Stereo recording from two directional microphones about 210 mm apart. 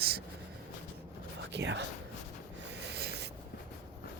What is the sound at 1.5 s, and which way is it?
Speech, 55° right (ahead or behind).